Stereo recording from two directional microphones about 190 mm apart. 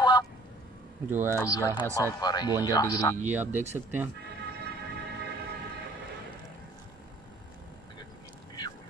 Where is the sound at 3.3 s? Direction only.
10° right (ahead or behind).